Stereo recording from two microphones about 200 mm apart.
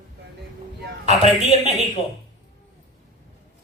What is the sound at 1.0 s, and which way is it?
Speech, 35° right (ahead or behind).